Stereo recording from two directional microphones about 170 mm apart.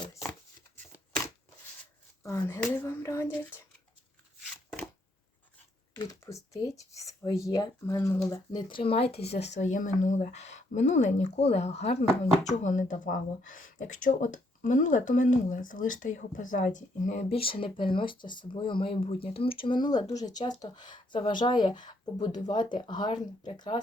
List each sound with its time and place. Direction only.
0.0 s a sound: 15° left (ahead or behind)
2.2 s speech: 15° left (ahead or behind)
6.0 s speech: 20° left (ahead or behind)
8.5 s speech: 30° left (ahead or behind)
9.6 s speech: 45° left (ahead or behind); by 23.8 s 30° left (ahead or behind)